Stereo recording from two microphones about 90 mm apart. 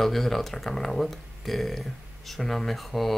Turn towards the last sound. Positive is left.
turn(degrees=0)  # may be behind; listen again after turning